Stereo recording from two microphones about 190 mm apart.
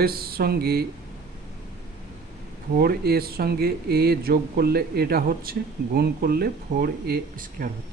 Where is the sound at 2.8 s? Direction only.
55° right (ahead or behind).